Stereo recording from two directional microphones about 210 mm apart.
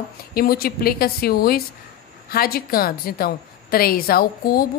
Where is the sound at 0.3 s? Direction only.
45° left (ahead or behind).